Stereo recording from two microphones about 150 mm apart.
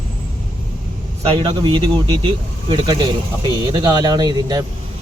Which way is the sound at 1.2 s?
40° right (ahead or behind).